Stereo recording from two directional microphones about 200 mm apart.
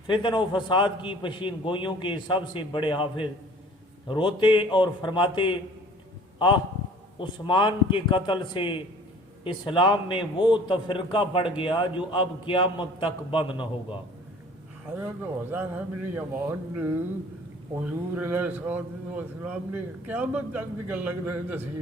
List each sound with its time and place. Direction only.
0.1 s a man's voice: 25° left (ahead or behind)
7.2 s a man's voice: 25° left (ahead or behind)
14.9 s speech: 10° right (ahead or behind)